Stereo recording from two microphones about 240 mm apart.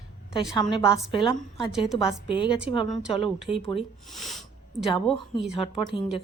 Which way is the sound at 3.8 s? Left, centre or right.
Centre.